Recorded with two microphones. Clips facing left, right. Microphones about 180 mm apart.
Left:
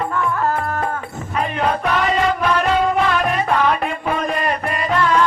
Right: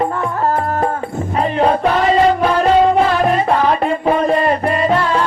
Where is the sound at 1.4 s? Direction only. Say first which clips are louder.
Right 5 dB; 35° right (ahead or behind).